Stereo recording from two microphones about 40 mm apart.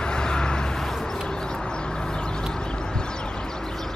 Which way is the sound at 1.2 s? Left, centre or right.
Centre.